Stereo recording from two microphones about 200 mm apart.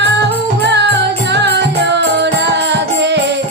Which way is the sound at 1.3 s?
60° right (ahead or behind).